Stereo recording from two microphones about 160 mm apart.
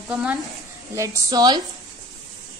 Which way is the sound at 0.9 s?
20° right (ahead or behind).